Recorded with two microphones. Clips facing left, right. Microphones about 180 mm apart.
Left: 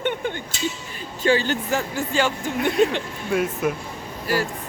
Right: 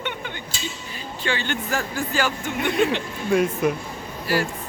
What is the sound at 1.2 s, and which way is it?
Speech, 35° left (ahead or behind).